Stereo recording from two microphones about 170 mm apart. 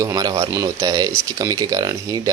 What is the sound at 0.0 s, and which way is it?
Speech, 20° right (ahead or behind).